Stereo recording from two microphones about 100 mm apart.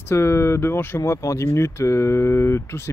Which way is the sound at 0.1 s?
25° left (ahead or behind).